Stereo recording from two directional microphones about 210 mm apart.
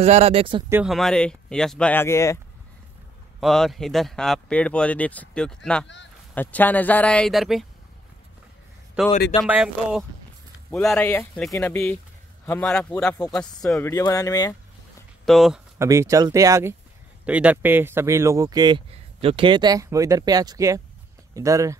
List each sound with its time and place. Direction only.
0.0 s speech: 30° right (ahead or behind)
0.7 s speech: 10° right (ahead or behind)
0.9 s speech: 5° left (ahead or behind)
3.3 s speech: centre (ahead or behind)
9.0 s speech: 5° right (ahead or behind)
11.0 s speech: 15° left (ahead or behind)
15.2 s speech: centre (ahead or behind)
15.8 s speech: 15° right (ahead or behind)